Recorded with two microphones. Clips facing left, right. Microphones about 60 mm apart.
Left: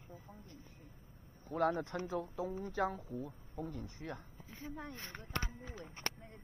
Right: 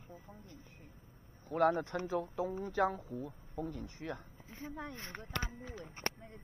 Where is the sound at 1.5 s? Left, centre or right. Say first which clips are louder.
Right 4 dB; right.